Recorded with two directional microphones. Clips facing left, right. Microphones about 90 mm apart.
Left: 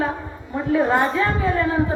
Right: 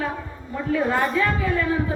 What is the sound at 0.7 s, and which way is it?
Speech, 30° left (ahead or behind).